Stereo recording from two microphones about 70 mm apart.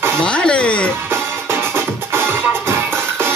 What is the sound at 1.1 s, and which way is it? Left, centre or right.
Music, right.